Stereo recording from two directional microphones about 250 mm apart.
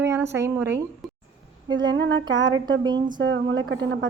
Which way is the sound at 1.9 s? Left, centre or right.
Right.